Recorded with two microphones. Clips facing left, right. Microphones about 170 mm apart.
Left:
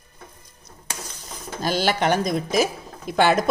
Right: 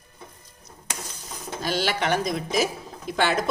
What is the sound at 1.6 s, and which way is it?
Speech, 45° left (ahead or behind).